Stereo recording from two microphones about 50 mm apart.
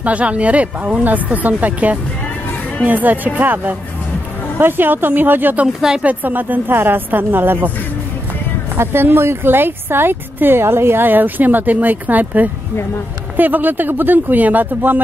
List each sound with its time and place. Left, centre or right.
0.0 s a woman's voice: right
5.8 s a woman's voice: centre
6.0 s a woman's voice: right
8.7 s a woman's voice: right